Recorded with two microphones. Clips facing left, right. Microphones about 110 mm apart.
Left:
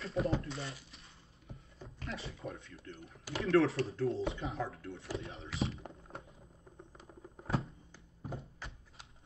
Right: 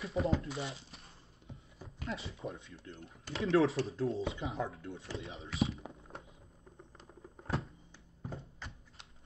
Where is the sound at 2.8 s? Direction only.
Centre (ahead or behind).